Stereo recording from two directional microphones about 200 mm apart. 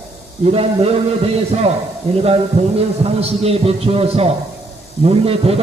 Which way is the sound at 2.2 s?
30° right (ahead or behind).